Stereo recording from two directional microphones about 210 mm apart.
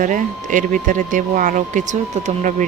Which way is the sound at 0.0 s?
35° right (ahead or behind).